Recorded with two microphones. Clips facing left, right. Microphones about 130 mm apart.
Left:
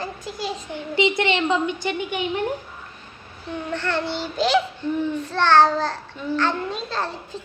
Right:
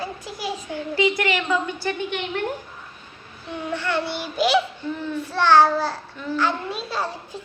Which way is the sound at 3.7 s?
10° right (ahead or behind).